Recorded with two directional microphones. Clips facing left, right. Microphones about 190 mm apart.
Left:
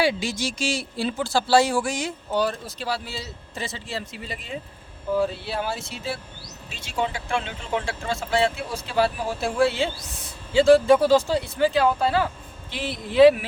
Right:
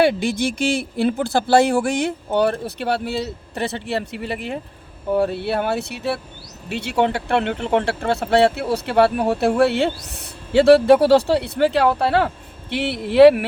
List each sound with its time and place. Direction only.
0.0 s speech: 55° right (ahead or behind)